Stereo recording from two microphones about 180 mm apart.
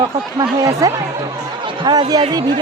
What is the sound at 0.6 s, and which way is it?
Speech, 20° right (ahead or behind).